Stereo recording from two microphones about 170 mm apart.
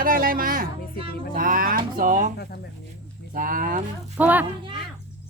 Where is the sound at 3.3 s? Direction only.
55° right (ahead or behind).